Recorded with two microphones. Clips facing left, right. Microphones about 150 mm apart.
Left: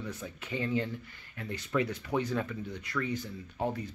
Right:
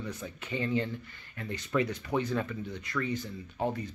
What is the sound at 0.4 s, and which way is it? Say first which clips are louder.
Speech: right 1 dB; 5° left (ahead or behind).